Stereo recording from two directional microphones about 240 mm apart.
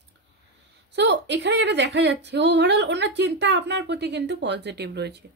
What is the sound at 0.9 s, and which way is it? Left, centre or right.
Speech, right.